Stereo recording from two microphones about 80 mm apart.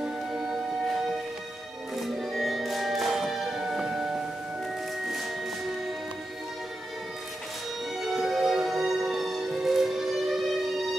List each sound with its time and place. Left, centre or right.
0.0 s music: centre
2.0 s music: centre
8.0 s music: centre